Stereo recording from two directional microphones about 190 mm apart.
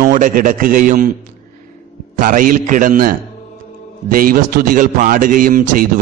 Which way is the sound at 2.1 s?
45° right (ahead or behind).